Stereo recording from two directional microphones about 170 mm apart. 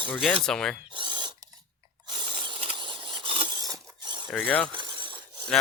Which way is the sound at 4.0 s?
25° right (ahead or behind).